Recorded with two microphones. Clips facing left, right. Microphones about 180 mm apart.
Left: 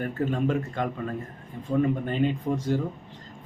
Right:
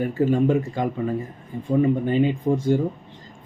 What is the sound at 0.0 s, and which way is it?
Speech, 5° right (ahead or behind).